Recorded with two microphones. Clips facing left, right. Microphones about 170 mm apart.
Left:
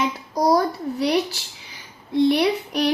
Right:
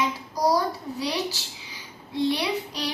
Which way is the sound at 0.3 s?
55° left (ahead or behind).